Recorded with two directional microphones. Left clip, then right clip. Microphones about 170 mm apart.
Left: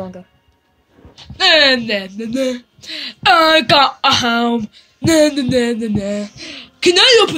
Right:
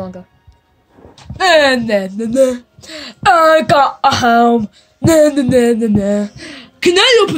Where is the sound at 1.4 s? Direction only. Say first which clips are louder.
Right 1 dB; 50° right (ahead or behind).